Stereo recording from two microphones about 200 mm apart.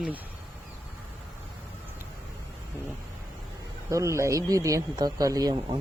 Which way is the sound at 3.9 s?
15° right (ahead or behind).